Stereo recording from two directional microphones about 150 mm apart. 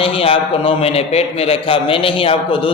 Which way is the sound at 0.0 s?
35° left (ahead or behind).